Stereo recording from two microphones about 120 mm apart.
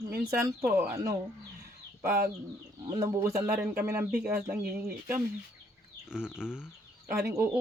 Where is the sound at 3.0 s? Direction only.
25° right (ahead or behind).